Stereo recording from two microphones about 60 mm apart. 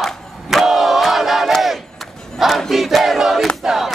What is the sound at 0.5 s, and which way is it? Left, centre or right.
Crowd, centre.